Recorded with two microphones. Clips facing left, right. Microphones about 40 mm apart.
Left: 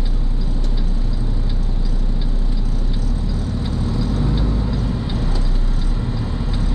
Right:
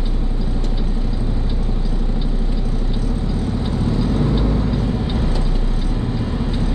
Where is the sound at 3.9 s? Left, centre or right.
Centre.